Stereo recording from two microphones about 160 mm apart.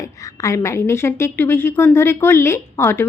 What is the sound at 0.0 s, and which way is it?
Speech, 20° left (ahead or behind).